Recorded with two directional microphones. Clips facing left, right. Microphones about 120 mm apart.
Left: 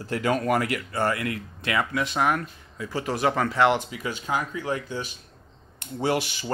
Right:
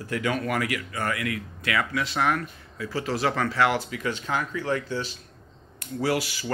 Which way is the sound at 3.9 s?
10° left (ahead or behind).